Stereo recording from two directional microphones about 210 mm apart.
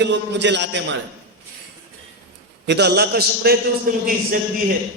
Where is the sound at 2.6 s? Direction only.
55° right (ahead or behind).